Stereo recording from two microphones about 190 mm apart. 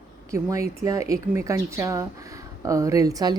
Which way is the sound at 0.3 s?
15° right (ahead or behind).